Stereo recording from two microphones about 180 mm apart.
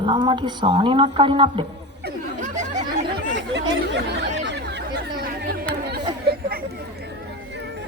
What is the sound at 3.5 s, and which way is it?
Chatter, 75° right (ahead or behind).